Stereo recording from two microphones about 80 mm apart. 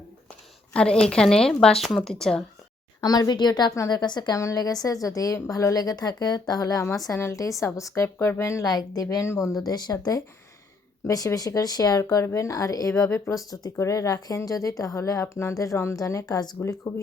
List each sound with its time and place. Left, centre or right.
0.7 s a woman's voice: centre
3.0 s speech: left
4.4 s a woman's voice: left
8.6 s speech: left
11.0 s a woman's voice: left
11.3 s speech: left
12.9 s a woman's voice: left
13.5 s a woman's voice: left